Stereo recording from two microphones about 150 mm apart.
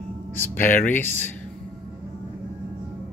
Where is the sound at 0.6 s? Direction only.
60° left (ahead or behind).